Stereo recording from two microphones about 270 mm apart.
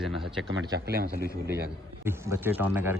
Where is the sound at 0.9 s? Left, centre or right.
Right.